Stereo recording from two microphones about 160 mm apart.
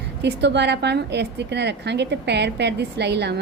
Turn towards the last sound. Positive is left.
turn(degrees=-90)